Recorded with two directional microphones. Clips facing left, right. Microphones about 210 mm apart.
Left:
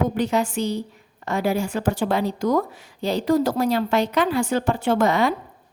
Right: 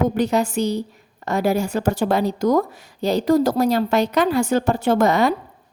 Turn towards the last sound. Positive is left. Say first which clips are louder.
# right 2 dB
turn(degrees=-40)  # may be behind; listen again after turning